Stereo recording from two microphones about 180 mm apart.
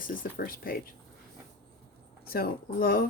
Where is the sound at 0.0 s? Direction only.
50° left (ahead or behind).